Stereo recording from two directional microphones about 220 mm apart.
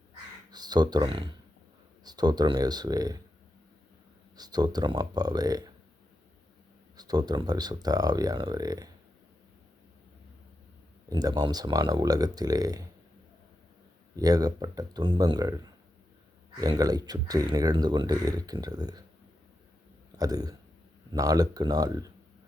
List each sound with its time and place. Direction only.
0.5 s speech: 20° right (ahead or behind)
4.4 s speech: 20° right (ahead or behind)
6.9 s speech: 15° right (ahead or behind)
11.1 s speech: 15° right (ahead or behind)
14.2 s speech: 15° right (ahead or behind)
20.1 s speech: 15° right (ahead or behind)